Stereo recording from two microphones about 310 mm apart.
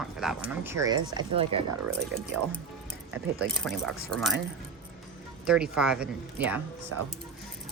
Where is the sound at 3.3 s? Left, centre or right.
Centre.